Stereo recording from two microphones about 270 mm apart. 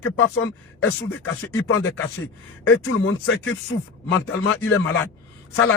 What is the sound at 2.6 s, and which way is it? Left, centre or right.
Speech, left.